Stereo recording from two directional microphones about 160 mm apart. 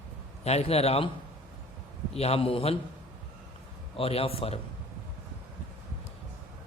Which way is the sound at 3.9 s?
35° left (ahead or behind).